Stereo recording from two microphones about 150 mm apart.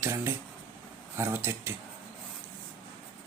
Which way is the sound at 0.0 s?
15° right (ahead or behind).